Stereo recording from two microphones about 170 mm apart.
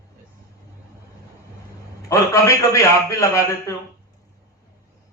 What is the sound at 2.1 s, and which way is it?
A man's voice, 20° left (ahead or behind).